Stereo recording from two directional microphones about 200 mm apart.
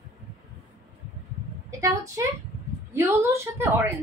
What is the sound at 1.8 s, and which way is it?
A woman's voice, 15° right (ahead or behind).